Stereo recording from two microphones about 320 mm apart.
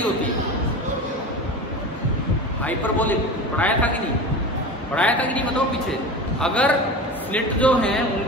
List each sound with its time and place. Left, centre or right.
2.6 s a man's voice: centre
4.9 s a man's voice: centre
6.4 s a man's voice: centre